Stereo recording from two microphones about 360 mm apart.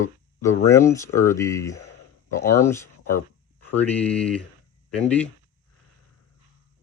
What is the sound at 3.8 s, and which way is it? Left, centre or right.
Speech, centre.